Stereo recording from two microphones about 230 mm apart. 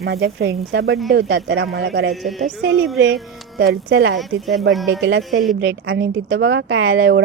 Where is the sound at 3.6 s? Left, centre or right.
Right.